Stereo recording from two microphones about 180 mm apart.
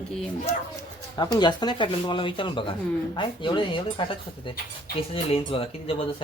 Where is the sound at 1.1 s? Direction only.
25° left (ahead or behind).